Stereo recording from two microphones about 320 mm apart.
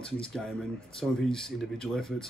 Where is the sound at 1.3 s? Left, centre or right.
Centre.